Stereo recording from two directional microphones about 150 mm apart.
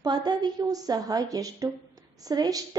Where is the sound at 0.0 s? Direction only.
30° right (ahead or behind).